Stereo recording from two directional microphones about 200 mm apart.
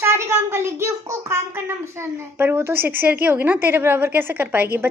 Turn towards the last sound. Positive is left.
turn(degrees=-10)  # may be behind; listen again after turning